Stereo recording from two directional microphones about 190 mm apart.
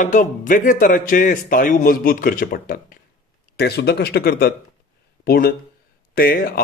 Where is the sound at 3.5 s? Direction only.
55° left (ahead or behind).